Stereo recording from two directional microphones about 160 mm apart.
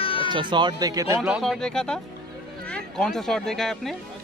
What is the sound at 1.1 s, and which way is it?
Speech, centre (ahead or behind).